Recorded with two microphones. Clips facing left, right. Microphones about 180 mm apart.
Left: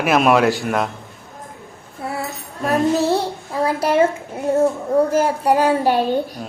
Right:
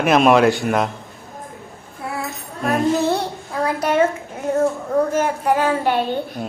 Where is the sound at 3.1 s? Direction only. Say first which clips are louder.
Left 2 dB; 30° left (ahead or behind).